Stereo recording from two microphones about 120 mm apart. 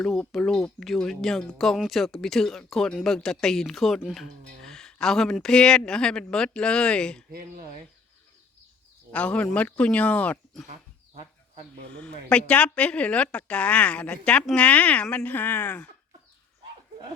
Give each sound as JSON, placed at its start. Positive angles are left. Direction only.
{"t": 0.0, "sound": "speech", "side_deg": 5}
{"t": 9.1, "sound": "speech", "side_deg": 10}
{"t": 10.7, "sound": "goat", "side_deg": -60}
{"t": 11.9, "sound": "speech", "side_deg": 10}